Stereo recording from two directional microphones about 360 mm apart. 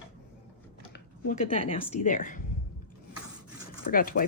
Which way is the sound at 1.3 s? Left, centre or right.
Centre.